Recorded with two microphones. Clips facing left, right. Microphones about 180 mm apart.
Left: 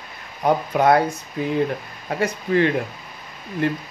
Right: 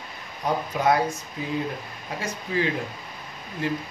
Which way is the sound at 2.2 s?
60° left (ahead or behind).